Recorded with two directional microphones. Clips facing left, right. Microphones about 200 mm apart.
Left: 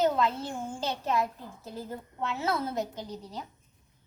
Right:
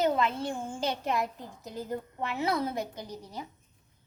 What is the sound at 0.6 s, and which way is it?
A child's voice, 10° right (ahead or behind).